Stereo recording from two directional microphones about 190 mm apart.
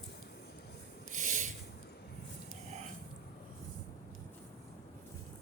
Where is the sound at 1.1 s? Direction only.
40° right (ahead or behind).